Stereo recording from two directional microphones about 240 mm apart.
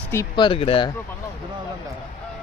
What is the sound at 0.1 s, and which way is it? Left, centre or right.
Speech, centre.